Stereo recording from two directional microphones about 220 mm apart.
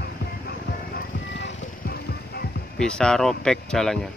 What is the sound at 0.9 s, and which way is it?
Music, 50° left (ahead or behind).